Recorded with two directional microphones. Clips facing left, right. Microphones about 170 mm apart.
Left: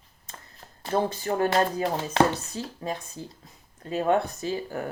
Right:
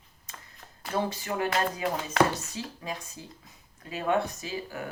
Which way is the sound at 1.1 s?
40° left (ahead or behind).